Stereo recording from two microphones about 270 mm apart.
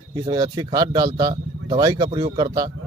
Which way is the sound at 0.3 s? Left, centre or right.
Centre.